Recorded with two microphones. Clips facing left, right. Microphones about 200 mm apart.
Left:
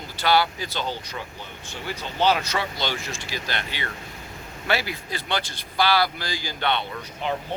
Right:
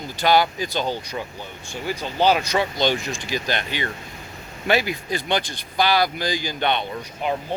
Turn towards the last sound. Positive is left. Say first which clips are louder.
# right 3 dB
turn(degrees=-15)  # may be behind; listen again after turning